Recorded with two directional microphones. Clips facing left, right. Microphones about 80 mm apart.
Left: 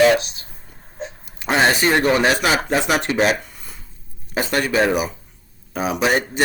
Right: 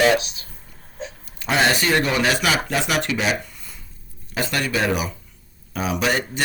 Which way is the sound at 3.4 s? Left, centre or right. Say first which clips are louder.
Left 1 dB; left.